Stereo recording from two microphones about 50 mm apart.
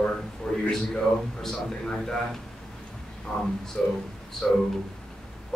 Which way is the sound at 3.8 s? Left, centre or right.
Centre.